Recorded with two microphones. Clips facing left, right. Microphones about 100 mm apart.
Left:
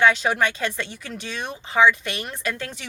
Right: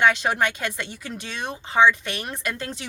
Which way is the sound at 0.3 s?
15° right (ahead or behind).